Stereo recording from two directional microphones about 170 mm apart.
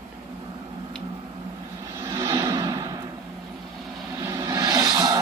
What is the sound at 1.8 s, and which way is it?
Music, 15° right (ahead or behind).